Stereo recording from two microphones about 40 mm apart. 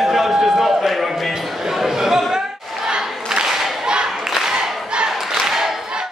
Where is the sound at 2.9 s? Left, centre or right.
Centre.